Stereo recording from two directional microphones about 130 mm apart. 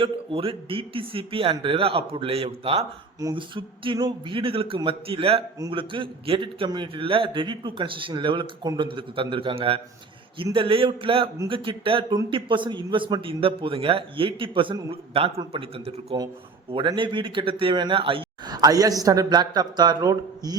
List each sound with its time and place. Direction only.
0.0 s a man's voice: 45° right (ahead or behind)